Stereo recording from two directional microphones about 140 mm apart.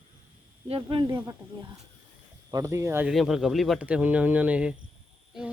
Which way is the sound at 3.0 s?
5° right (ahead or behind).